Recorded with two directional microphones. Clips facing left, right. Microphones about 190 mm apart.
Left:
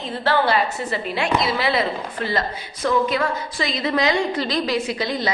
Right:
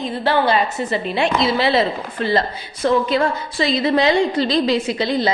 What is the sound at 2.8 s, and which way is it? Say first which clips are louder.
A woman's voice: right 3 dB; 30° right (ahead or behind).